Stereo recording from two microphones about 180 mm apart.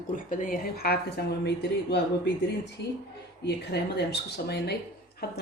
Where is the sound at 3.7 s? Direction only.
65° left (ahead or behind).